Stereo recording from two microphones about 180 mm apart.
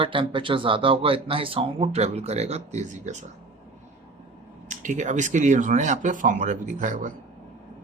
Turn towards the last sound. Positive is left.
turn(degrees=-45)  # may be behind; listen again after turning